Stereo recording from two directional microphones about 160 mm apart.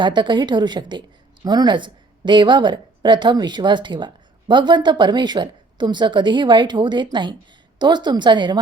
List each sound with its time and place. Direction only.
0.0 s a woman's voice: 30° right (ahead or behind)